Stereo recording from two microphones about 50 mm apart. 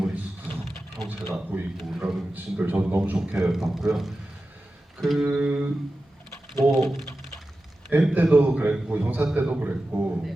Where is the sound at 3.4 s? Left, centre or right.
Centre.